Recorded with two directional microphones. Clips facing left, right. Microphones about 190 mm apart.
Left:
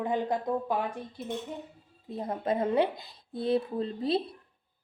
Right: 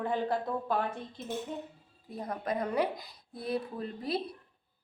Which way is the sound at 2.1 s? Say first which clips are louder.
Left 4 dB; 25° left (ahead or behind).